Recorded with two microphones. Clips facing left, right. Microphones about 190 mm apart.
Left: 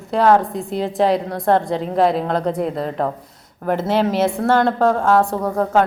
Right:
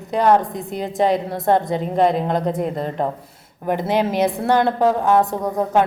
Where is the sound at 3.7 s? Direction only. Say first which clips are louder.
Left 1 dB; 15° right (ahead or behind).